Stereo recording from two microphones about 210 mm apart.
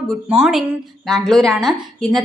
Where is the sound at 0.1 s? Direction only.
Centre (ahead or behind).